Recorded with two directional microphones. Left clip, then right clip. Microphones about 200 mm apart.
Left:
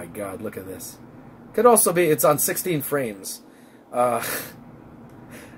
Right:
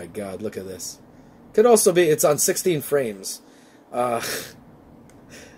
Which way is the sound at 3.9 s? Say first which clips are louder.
Left 2 dB; 45° right (ahead or behind).